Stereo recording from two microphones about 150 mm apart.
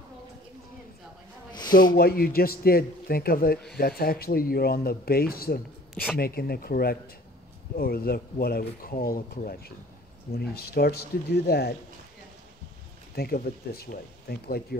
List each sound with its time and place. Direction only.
2.0 s a man's voice: 90° left
3.7 s speech: 90° left; by 9.6 s 75° left (ahead or behind)
10.3 s speech: 90° left
13.1 s speech: 90° left